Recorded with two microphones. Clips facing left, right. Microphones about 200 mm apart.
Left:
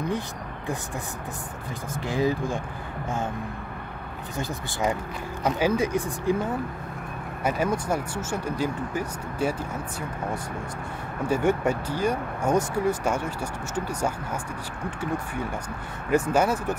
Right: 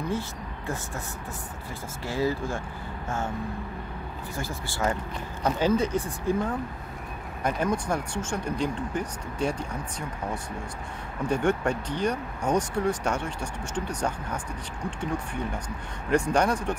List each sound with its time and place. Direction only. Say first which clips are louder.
2.0 s speech: left 2 dB; 15° left (ahead or behind)
4.4 s speech: left 2 dB; 20° left (ahead or behind)
7.4 s speech: left 1 dB; 5° left (ahead or behind)
11.2 s speech: left 2 dB; 5° left (ahead or behind)